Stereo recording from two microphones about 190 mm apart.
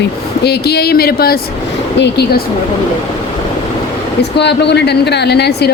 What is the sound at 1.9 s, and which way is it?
Speech, 65° left (ahead or behind).